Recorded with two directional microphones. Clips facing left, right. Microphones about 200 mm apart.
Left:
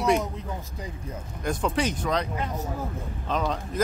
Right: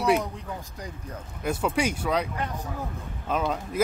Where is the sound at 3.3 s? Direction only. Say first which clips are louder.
Right 1 dB; 10° right (ahead or behind).